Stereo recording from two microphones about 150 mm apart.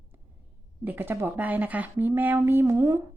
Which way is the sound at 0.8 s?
15° right (ahead or behind).